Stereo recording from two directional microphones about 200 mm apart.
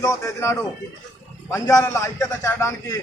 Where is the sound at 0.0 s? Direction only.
15° left (ahead or behind).